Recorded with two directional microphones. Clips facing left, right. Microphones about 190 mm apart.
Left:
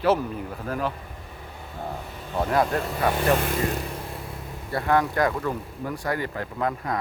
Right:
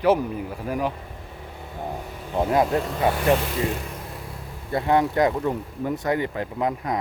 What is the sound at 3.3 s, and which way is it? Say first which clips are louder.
Speech: even; 50° left (ahead or behind).